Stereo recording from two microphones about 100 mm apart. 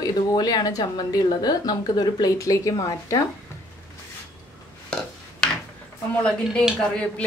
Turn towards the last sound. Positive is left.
turn(degrees=10)  # may be behind; listen again after turning